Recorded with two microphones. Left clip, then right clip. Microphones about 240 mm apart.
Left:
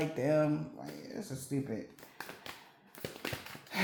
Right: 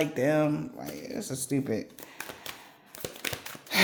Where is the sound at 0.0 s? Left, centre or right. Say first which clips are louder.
Right 5 dB; right.